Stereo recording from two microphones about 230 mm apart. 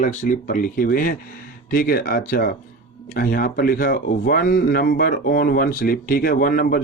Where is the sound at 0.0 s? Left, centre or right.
Left.